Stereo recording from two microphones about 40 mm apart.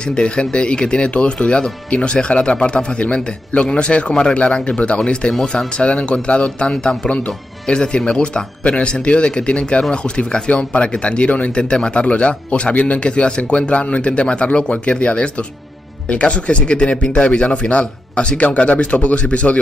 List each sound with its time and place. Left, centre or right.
0.0 s speech: left
11.5 s speech: left